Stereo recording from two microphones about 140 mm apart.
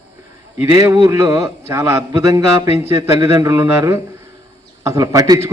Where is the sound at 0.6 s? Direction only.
20° right (ahead or behind).